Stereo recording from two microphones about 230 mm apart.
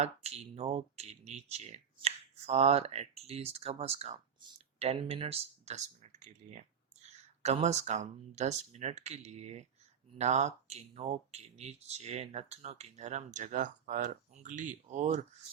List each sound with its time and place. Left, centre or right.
0.0 s speech: right